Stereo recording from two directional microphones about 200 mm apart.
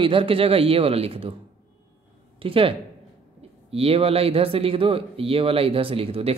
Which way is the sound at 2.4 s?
25° right (ahead or behind).